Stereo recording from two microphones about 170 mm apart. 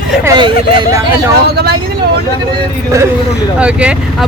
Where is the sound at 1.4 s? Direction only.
65° right (ahead or behind).